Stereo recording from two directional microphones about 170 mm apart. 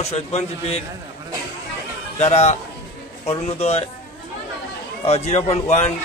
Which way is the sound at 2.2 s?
40° left (ahead or behind).